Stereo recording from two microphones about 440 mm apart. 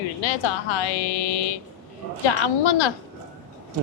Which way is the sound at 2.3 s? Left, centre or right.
Left.